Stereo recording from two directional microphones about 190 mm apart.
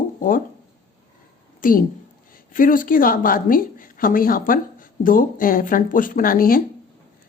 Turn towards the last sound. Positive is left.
turn(degrees=50)  # may be behind; listen again after turning